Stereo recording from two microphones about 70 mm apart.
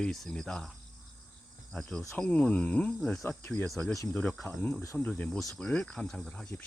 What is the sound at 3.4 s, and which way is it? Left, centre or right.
Speech, left.